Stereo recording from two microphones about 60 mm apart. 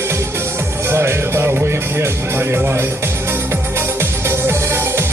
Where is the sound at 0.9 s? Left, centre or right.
Right.